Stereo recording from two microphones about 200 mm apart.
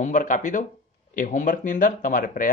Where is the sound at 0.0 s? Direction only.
40° left (ahead or behind).